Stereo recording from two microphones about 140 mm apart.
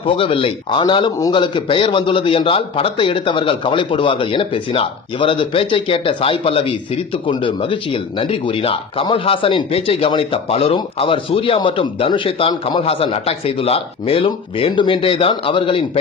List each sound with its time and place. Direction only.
0.0 s speech: 40° left (ahead or behind)